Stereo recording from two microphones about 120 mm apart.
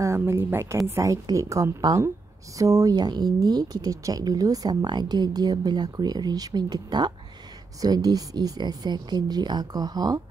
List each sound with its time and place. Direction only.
0.0 s a woman's voice: 25° right (ahead or behind)